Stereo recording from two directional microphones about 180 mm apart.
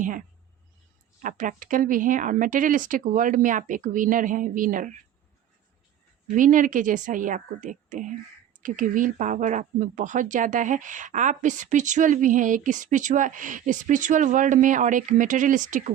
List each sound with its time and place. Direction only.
0.0 s speech: 50° right (ahead or behind)
6.3 s speech: 45° right (ahead or behind)